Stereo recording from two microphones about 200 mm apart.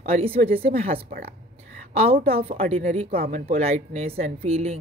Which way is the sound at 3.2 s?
45° right (ahead or behind).